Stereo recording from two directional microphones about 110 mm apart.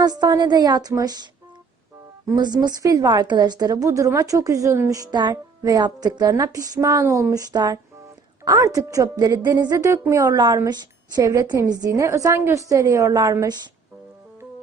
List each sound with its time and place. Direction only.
0.0 s a woman's voice: 40° right (ahead or behind)
2.3 s a woman's voice: 40° right (ahead or behind)